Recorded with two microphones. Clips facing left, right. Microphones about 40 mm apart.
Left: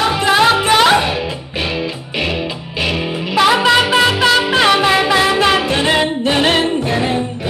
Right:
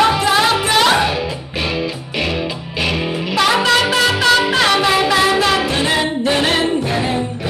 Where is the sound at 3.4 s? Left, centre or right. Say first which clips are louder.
Left 3 dB; centre.